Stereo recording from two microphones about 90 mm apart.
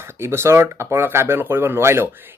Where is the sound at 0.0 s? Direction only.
25° right (ahead or behind).